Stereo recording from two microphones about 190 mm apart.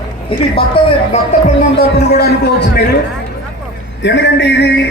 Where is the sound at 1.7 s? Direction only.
60° left (ahead or behind).